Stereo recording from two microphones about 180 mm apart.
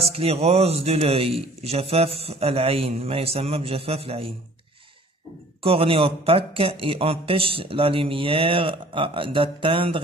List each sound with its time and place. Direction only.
0.1 s speech: 35° right (ahead or behind)
5.6 s speech: 30° right (ahead or behind)